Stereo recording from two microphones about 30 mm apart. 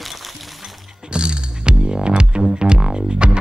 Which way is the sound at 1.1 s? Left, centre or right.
Right.